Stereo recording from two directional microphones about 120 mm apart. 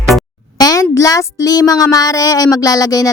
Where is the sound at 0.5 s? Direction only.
30° left (ahead or behind).